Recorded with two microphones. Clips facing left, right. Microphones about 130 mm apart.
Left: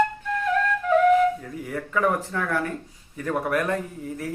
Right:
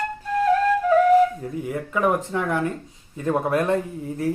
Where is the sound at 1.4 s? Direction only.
20° right (ahead or behind).